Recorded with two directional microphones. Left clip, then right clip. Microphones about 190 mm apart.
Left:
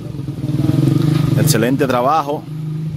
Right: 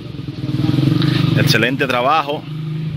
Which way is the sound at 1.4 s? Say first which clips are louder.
Even; 25° left (ahead or behind).